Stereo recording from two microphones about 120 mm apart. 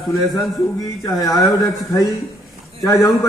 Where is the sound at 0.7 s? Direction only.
25° left (ahead or behind).